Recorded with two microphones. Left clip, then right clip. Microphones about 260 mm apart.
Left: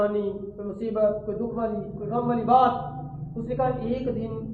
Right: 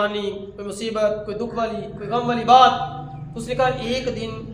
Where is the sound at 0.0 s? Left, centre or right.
Right.